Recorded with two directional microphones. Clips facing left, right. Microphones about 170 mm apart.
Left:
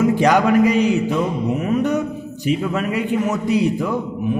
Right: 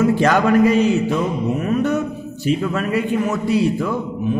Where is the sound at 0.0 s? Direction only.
15° left (ahead or behind).